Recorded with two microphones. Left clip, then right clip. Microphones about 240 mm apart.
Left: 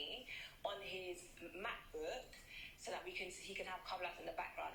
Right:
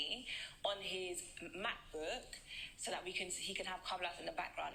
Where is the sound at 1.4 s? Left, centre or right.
Right.